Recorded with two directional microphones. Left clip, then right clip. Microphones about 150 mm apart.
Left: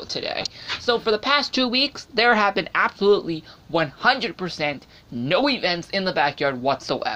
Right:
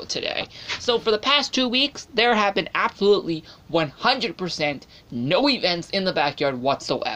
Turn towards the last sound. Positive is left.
turn(degrees=-10)  # may be behind; listen again after turning